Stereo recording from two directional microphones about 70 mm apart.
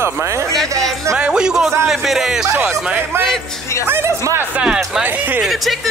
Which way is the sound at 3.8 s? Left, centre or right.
Right.